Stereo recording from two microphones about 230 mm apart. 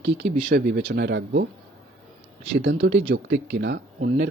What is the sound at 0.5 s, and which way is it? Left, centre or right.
Speech, right.